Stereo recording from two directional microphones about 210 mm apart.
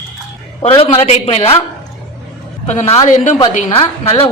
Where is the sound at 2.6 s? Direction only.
30° left (ahead or behind).